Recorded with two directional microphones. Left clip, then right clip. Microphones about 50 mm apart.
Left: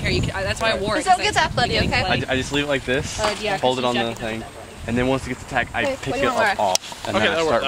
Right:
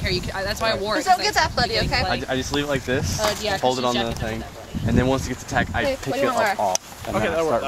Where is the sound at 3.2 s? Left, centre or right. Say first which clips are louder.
Right 1 dB; right.